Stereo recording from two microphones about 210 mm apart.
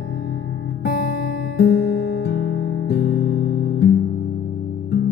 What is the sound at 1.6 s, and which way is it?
Music, 55° left (ahead or behind).